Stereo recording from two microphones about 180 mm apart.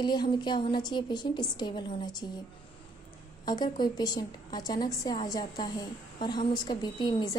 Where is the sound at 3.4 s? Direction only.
25° left (ahead or behind).